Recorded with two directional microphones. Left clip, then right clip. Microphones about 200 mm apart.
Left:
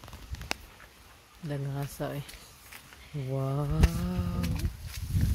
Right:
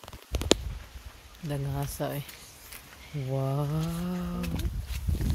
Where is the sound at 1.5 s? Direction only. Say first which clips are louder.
Right 2 dB; 5° right (ahead or behind).